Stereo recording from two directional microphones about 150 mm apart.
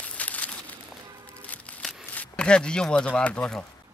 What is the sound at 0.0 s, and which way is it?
Crumpling, 10° left (ahead or behind).